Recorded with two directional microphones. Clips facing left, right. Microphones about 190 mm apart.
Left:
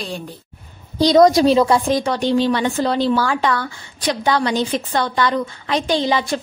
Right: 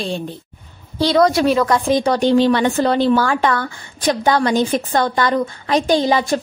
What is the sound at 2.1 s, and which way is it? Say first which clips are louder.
Speech: right 7 dB; 45° right (ahead or behind).